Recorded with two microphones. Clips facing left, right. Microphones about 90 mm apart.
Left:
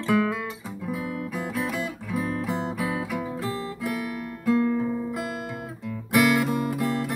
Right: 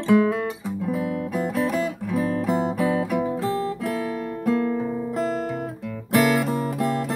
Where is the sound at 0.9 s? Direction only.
30° right (ahead or behind).